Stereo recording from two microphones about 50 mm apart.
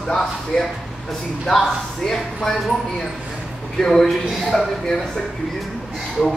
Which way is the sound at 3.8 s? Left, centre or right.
Centre.